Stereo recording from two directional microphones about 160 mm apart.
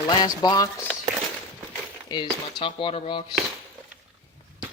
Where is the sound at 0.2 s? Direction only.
25° left (ahead or behind).